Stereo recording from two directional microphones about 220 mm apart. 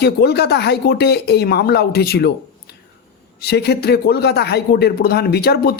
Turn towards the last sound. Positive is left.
turn(degrees=45)  # may be behind; listen again after turning